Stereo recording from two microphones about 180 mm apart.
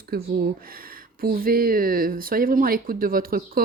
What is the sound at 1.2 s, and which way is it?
Speech, 55° right (ahead or behind).